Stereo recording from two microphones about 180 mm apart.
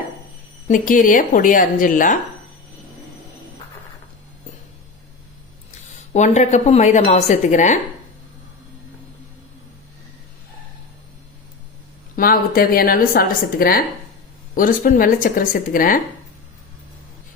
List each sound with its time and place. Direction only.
0.7 s a woman's voice: 50° left (ahead or behind)
6.1 s a woman's voice: 40° left (ahead or behind)
12.1 s a woman's voice: 55° left (ahead or behind)